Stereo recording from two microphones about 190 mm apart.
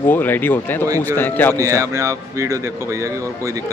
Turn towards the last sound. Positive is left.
turn(degrees=-15)  # may be behind; listen again after turning